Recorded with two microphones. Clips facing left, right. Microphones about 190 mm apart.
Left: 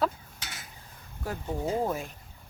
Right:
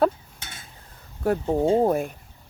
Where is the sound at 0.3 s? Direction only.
25° right (ahead or behind).